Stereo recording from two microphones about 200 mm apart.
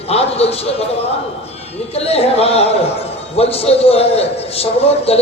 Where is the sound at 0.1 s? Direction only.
30° left (ahead or behind).